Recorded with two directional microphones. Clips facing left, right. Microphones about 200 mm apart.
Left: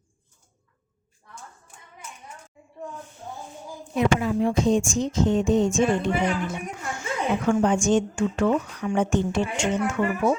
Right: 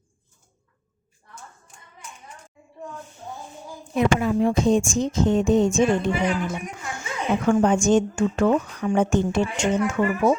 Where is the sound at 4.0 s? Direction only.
55° right (ahead or behind).